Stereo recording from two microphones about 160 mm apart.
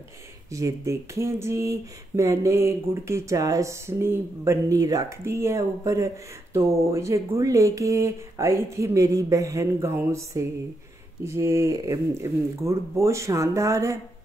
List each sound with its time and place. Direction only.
0.5 s speech: 20° right (ahead or behind)